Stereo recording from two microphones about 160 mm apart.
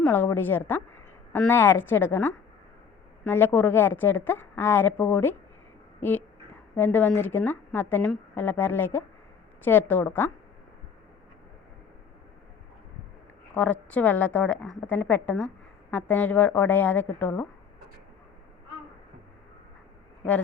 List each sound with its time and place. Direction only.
0.0 s a woman's voice: 15° left (ahead or behind)
13.5 s a woman's voice: 10° left (ahead or behind)